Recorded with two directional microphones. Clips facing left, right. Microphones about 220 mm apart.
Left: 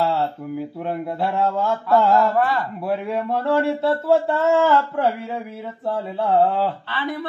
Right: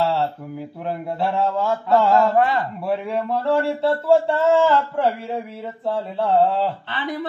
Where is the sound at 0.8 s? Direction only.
Centre (ahead or behind).